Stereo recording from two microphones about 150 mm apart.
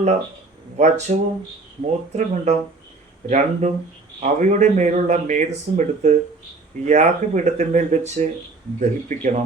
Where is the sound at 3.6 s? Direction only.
50° right (ahead or behind).